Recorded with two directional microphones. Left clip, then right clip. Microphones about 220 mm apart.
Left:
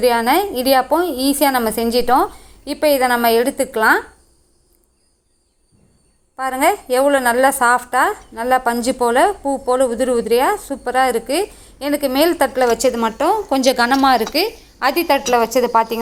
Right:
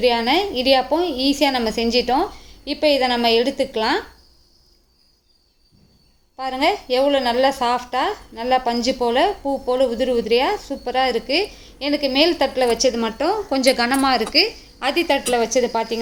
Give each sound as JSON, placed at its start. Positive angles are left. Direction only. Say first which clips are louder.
{"t": 0.0, "sound": "a woman's voice", "louder": "left 3 dB", "side_deg": 10}
{"t": 6.6, "sound": "a woman's voice", "louder": "left 3 dB", "side_deg": 10}